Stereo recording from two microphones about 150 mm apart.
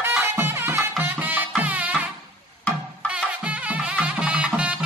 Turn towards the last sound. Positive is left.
turn(degrees=-5)  # may be behind; listen again after turning